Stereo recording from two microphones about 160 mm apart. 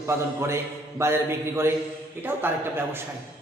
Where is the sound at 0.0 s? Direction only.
15° right (ahead or behind).